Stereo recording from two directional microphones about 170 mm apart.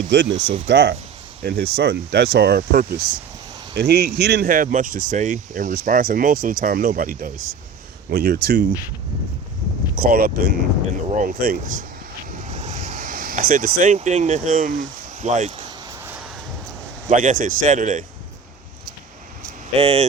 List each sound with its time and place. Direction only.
0.1 s speech: 90° right
1.5 s speech: 70° right (ahead or behind)
4.4 s speech: 55° right (ahead or behind)
8.1 s speech: 65° right (ahead or behind)
9.9 s speech: 60° right (ahead or behind)
11.1 s speech: 45° right (ahead or behind)
11.3 s speech: 60° right (ahead or behind)
12.4 s vehicle: 45° right (ahead or behind)
17.1 s speech: 45° right (ahead or behind)
19.7 s speech: 35° right (ahead or behind)